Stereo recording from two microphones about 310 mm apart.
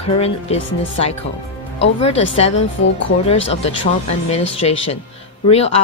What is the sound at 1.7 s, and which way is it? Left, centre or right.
Speech, centre.